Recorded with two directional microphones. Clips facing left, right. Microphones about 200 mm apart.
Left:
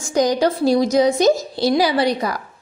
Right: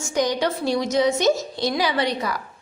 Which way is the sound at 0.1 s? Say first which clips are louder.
Left 5 dB; 40° left (ahead or behind).